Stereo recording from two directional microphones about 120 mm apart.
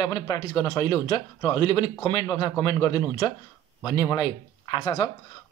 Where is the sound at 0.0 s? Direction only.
40° left (ahead or behind).